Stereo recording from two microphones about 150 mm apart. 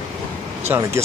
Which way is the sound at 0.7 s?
20° right (ahead or behind).